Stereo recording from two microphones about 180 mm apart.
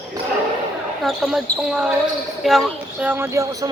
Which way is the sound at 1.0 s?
Centre (ahead or behind).